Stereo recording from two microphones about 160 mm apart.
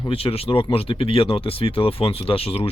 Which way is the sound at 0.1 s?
35° left (ahead or behind).